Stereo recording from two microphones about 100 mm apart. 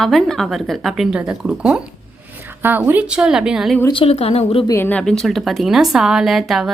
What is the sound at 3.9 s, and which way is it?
Speech, 75° left (ahead or behind).